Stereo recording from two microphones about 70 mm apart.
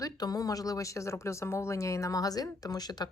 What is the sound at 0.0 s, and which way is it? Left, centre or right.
A woman's voice, left.